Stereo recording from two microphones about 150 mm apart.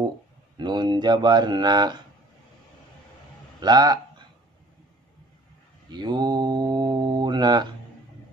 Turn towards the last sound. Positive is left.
turn(degrees=-30)  # may be behind; listen again after turning